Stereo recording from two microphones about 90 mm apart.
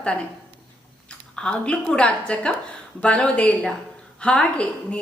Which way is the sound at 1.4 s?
10° left (ahead or behind).